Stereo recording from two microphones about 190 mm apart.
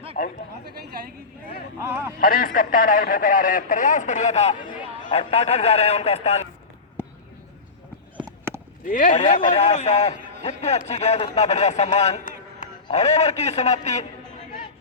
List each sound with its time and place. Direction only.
1.8 s speech: 15° right (ahead or behind)
2.2 s a man's voice: 50° left (ahead or behind)
8.8 s a man's voice: 45° left (ahead or behind)
9.1 s a man's voice: 30° left (ahead or behind)